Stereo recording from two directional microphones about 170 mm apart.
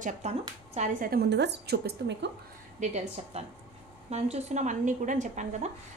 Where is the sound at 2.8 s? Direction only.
40° right (ahead or behind).